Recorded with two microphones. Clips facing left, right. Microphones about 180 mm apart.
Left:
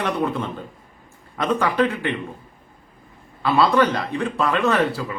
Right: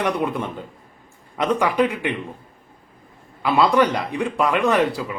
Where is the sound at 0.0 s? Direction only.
15° right (ahead or behind).